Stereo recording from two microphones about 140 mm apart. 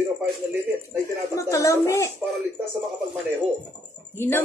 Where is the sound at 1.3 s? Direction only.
20° left (ahead or behind).